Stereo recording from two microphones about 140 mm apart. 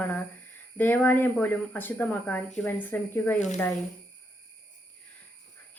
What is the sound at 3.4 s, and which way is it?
Speech, 60° left (ahead or behind).